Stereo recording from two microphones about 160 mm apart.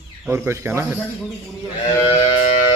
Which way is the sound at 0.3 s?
15° right (ahead or behind).